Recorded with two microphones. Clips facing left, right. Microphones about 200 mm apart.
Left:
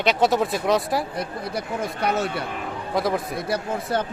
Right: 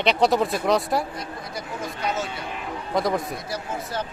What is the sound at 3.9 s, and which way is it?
Speech, 55° left (ahead or behind).